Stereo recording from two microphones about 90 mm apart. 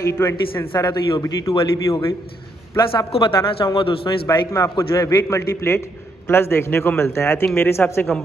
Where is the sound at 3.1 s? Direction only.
70° left (ahead or behind).